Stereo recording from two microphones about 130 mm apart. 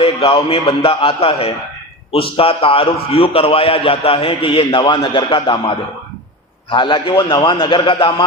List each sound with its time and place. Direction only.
0.0 s a man's voice: 50° left (ahead or behind)